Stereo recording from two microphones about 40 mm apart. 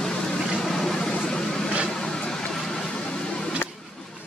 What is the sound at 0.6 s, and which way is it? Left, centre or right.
Vehicle, centre.